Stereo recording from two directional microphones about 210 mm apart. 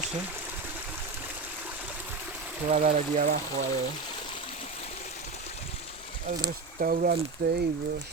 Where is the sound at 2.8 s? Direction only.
40° right (ahead or behind).